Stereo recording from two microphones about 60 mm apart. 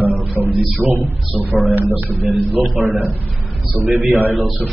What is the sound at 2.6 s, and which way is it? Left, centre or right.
Speech, centre.